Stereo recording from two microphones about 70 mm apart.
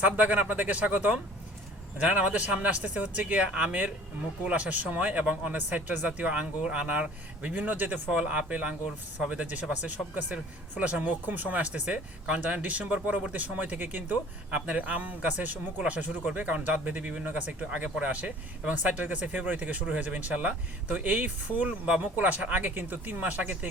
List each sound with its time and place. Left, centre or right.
0.0 s speech: right